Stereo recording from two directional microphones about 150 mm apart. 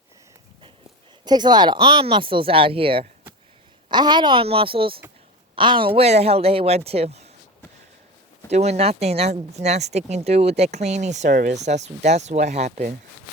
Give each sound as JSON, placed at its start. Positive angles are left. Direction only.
{"t": 1.2, "sound": "speech", "side_deg": -30}
{"t": 8.4, "sound": "speech", "side_deg": -45}